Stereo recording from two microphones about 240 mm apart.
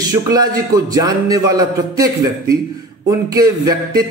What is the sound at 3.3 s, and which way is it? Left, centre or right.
Speech, centre.